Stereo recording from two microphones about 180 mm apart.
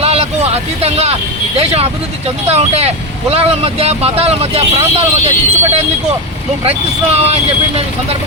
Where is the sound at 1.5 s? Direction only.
35° right (ahead or behind).